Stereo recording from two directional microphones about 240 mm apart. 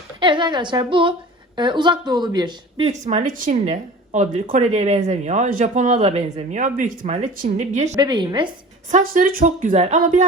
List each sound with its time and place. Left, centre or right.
0.2 s speech: centre
7.9 s a woman's voice: centre
8.9 s a woman's voice: right